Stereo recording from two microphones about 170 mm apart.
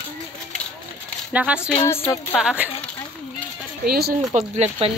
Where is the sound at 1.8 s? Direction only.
20° left (ahead or behind).